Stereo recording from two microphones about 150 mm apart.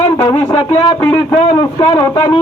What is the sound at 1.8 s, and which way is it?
Speech, 25° left (ahead or behind).